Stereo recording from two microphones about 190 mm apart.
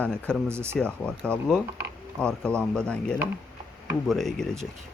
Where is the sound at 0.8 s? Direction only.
5° left (ahead or behind).